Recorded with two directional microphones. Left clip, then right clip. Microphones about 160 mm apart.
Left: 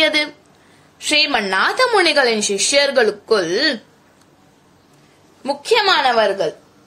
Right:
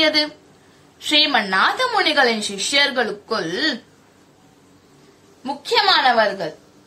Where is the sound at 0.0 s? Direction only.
40° left (ahead or behind).